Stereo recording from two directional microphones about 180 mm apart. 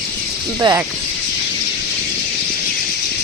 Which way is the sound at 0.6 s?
20° right (ahead or behind).